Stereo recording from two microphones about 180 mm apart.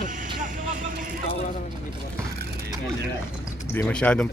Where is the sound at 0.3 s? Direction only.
45° right (ahead or behind).